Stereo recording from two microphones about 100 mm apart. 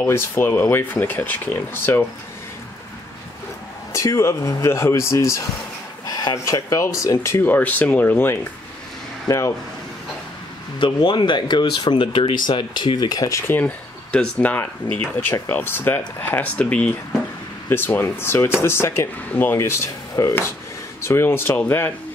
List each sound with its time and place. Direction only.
0.0 s speech: 25° left (ahead or behind)
3.9 s speech: 30° left (ahead or behind)
10.8 s speech: 55° left (ahead or behind)
13.4 s speech: 20° left (ahead or behind)